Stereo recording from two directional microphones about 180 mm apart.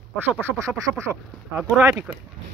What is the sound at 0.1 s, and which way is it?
Speech, 10° right (ahead or behind).